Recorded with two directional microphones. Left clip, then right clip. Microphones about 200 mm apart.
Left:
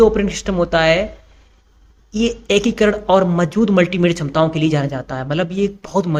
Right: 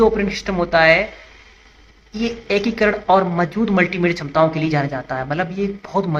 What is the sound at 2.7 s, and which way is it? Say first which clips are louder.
Speech: right 1 dB; 35° left (ahead or behind).